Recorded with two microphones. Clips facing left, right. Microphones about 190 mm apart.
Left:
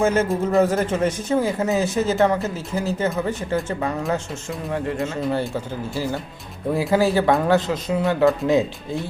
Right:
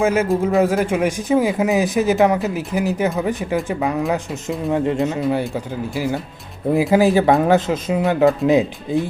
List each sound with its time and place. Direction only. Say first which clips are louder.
0.0 s speech: right 2 dB; 10° right (ahead or behind)